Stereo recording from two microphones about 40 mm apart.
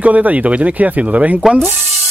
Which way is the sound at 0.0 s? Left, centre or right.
Right.